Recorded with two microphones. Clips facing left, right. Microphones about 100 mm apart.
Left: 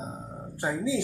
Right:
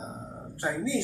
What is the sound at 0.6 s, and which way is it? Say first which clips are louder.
Speech: left 1 dB; 15° left (ahead or behind).